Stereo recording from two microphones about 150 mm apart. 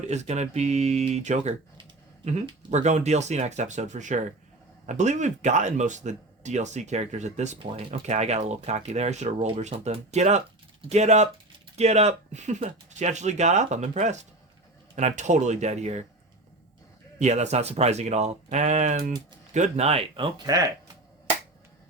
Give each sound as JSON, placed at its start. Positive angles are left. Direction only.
{"t": 0.1, "sound": "speech", "side_deg": -50}
{"t": 17.2, "sound": "speech", "side_deg": -50}
{"t": 20.5, "sound": "speech", "side_deg": -25}